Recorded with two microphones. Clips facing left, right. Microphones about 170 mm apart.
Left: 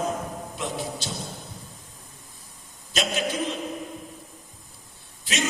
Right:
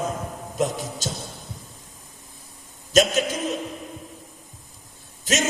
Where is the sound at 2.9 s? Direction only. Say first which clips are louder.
Right 9 dB; 45° right (ahead or behind).